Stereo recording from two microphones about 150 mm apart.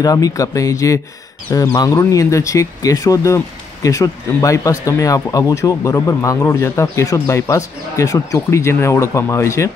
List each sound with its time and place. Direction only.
0.0 s speech: 25° left (ahead or behind)